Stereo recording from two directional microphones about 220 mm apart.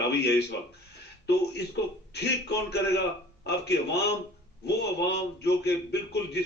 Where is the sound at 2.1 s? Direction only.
50° left (ahead or behind).